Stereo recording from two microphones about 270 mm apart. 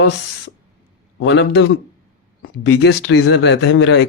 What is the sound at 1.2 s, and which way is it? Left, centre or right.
Speech, left.